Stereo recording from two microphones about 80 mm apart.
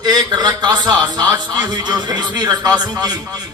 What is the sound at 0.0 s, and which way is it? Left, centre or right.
A man's voice, right.